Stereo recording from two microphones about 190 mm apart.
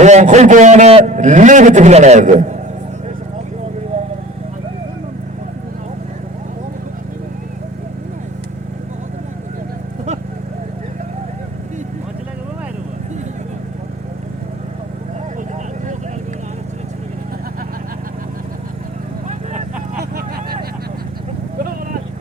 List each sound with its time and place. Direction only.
0.0 s a man's voice: 40° right (ahead or behind)
19.3 s vehicle: 45° right (ahead or behind)